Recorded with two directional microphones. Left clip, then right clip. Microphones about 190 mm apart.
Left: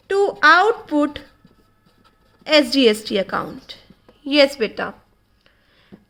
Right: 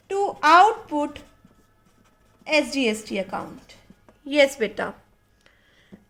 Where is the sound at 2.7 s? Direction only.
55° left (ahead or behind).